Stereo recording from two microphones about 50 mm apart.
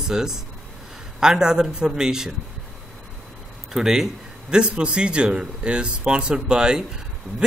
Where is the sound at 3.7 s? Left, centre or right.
Centre.